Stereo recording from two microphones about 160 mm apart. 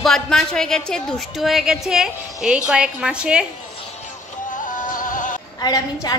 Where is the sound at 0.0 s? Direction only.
5° left (ahead or behind).